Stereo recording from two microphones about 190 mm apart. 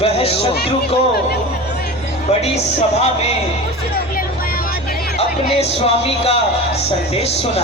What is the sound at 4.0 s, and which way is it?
Vehicle, 50° left (ahead or behind).